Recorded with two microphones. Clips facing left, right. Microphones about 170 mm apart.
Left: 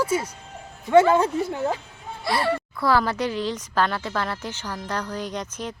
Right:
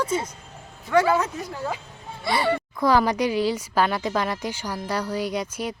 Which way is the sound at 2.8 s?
15° right (ahead or behind).